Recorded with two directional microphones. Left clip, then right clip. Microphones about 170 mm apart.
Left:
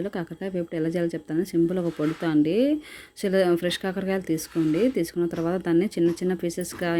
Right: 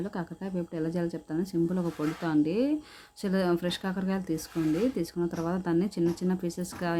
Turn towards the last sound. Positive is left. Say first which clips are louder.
# left 5 dB
turn(degrees=15)  # may be behind; listen again after turning